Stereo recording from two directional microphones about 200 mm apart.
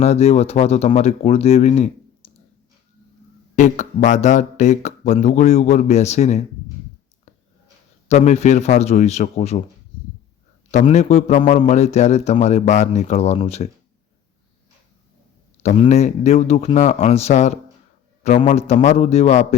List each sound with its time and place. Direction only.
0.0 s speech: 30° left (ahead or behind)
2.2 s clicking: 30° left (ahead or behind)
3.5 s speech: 40° left (ahead or behind)
8.0 s speech: 35° left (ahead or behind)
10.8 s speech: 35° left (ahead or behind)
15.6 s speech: 35° left (ahead or behind)